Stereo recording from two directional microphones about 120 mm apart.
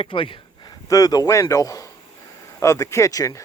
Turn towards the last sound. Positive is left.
turn(degrees=30)  # may be behind; listen again after turning